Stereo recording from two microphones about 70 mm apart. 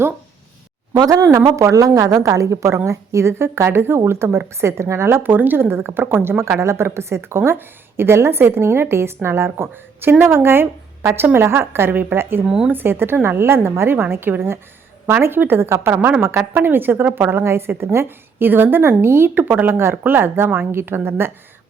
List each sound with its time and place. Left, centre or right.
1.0 s a woman's voice: right
12.5 s speech: centre
12.7 s a woman's voice: right
16.0 s a woman's voice: right